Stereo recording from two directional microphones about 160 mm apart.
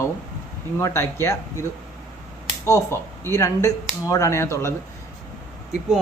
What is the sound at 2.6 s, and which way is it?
Speech, 20° left (ahead or behind).